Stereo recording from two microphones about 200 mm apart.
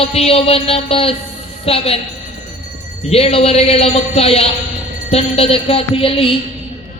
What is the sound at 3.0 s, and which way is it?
Speech, 30° left (ahead or behind).